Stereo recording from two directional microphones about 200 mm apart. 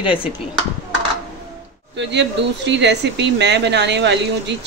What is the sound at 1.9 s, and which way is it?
Speech, 60° right (ahead or behind).